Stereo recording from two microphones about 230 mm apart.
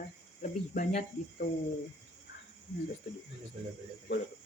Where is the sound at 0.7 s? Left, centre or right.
Left.